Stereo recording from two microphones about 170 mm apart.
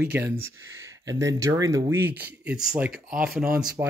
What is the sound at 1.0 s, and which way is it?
Speech, 20° right (ahead or behind).